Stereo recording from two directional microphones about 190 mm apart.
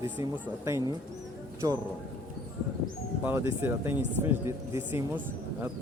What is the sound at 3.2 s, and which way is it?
Speech, 10° right (ahead or behind).